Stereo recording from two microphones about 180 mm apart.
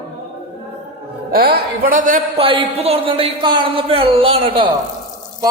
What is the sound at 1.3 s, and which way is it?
Speech, 60° right (ahead or behind).